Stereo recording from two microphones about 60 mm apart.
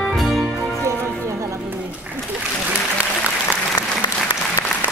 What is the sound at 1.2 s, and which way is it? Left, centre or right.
Music, right.